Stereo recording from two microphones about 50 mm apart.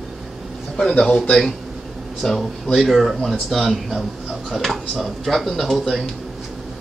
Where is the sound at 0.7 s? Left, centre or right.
Left.